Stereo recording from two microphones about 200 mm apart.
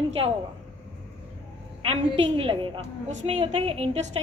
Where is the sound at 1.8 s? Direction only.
30° right (ahead or behind).